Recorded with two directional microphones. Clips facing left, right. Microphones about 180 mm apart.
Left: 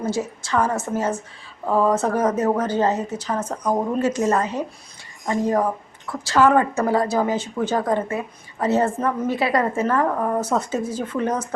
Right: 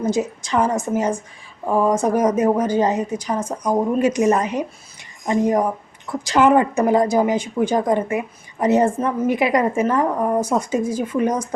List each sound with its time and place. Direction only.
0.0 s speech: 15° right (ahead or behind)